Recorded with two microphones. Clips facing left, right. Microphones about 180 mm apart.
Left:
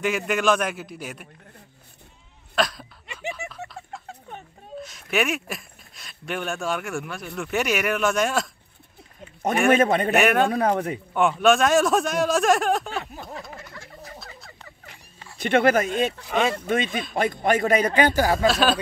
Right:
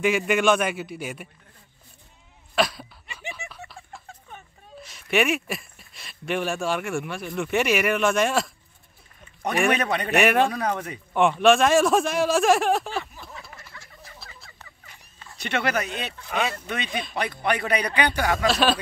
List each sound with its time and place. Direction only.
0.0 s speech: centre (ahead or behind)
2.5 s speech: 5° right (ahead or behind)
4.8 s speech: centre (ahead or behind)
9.8 s a man's voice: 45° left (ahead or behind)
10.1 s speech: centre (ahead or behind)
10.5 s a man's voice: 55° left (ahead or behind)
11.1 s speech: centre (ahead or behind)
13.0 s a sound: 55° left (ahead or behind)
15.4 s a man's voice: 50° left (ahead or behind); by 18.5 s 35° left (ahead or behind)
18.5 s speech: centre (ahead or behind)